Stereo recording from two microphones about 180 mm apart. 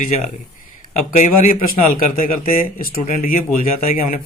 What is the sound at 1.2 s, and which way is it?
A man's voice, 45° left (ahead or behind).